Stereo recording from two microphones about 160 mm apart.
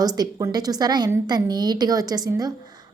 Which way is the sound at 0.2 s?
25° right (ahead or behind).